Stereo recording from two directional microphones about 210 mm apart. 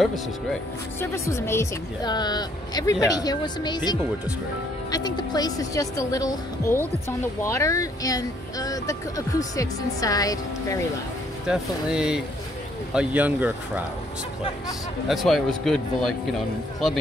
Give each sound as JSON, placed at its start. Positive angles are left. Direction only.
{"t": 0.0, "sound": "speech", "side_deg": 0}
{"t": 1.1, "sound": "a woman's voice", "side_deg": 15}
{"t": 11.4, "sound": "speech", "side_deg": -5}
{"t": 15.0, "sound": "speech", "side_deg": 0}